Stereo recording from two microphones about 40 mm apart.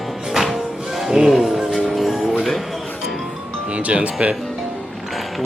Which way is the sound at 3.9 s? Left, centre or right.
Right.